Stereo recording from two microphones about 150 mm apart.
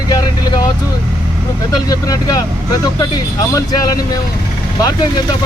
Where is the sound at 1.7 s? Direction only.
25° left (ahead or behind).